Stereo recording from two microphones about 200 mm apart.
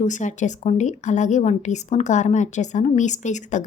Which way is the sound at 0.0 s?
40° left (ahead or behind).